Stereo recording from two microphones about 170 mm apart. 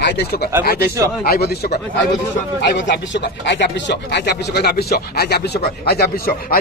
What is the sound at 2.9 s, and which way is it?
Speech, 90° left.